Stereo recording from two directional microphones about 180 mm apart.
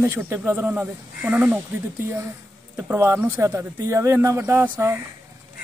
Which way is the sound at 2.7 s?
10° right (ahead or behind).